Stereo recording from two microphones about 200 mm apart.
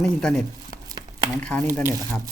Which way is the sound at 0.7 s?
20° right (ahead or behind).